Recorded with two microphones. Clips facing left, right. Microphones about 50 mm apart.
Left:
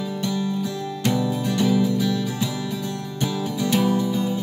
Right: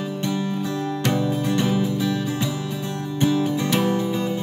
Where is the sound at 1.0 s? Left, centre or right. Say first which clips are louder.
Left 1 dB; right.